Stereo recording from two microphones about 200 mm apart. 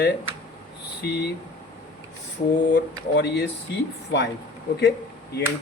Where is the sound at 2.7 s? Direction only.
60° left (ahead or behind).